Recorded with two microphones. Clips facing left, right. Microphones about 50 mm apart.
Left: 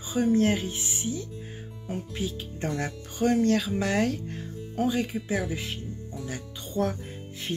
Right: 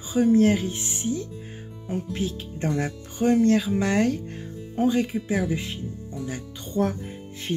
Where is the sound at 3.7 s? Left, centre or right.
Centre.